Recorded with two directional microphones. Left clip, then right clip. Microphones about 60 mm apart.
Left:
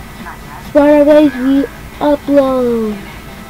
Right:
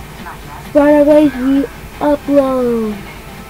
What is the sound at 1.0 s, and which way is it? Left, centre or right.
Speech, centre.